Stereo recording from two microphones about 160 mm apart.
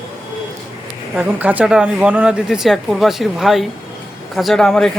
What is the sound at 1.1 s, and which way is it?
A man's voice, 10° right (ahead or behind).